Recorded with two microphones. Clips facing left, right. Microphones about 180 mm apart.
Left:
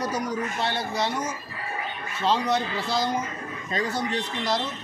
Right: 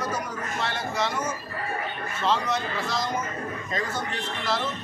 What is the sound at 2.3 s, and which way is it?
Speech, 35° left (ahead or behind).